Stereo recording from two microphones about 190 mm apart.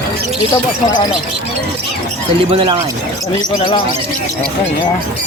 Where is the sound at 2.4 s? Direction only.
30° right (ahead or behind).